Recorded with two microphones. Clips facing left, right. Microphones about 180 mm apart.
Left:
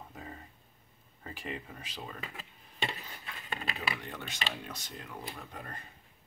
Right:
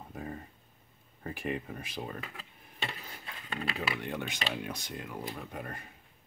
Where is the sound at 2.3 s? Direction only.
20° left (ahead or behind).